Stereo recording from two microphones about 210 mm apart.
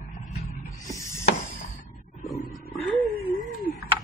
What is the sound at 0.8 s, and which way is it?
Snake, 15° left (ahead or behind).